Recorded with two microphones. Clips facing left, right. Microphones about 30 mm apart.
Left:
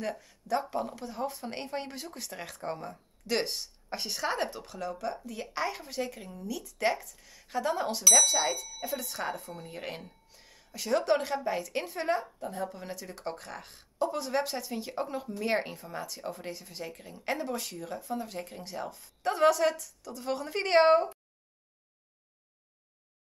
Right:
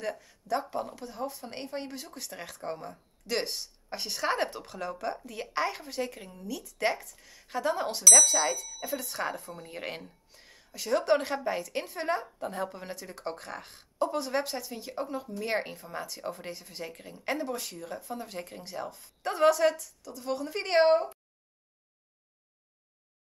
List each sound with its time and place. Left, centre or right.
0.0 s speech: centre
4.2 s speech: centre
9.7 s speech: centre
10.3 s a sound: centre
10.7 s speech: centre
12.4 s a woman's voice: right
12.7 s speech: centre
15.4 s speech: centre
20.0 s a woman's voice: centre